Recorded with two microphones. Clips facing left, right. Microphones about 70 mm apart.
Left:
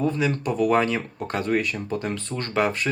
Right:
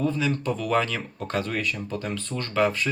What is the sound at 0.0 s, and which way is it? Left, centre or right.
Speech, left.